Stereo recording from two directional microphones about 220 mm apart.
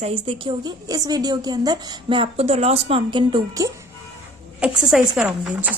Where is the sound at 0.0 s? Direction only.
25° right (ahead or behind).